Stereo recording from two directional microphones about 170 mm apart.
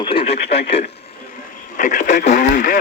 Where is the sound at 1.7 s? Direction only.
45° left (ahead or behind).